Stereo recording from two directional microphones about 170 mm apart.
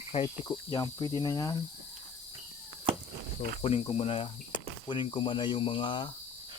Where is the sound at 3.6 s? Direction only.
35° left (ahead or behind).